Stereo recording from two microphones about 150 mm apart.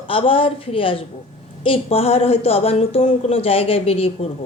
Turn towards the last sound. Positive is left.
turn(degrees=40)  # may be behind; listen again after turning